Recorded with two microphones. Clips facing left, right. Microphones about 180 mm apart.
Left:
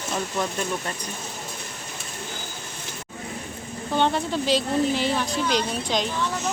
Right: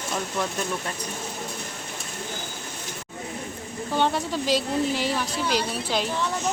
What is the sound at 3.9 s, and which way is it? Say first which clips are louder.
Speech: left 2 dB; 10° right (ahead or behind).